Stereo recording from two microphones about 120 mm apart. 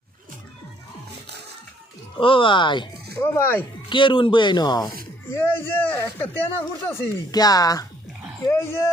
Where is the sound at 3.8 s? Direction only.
40° left (ahead or behind).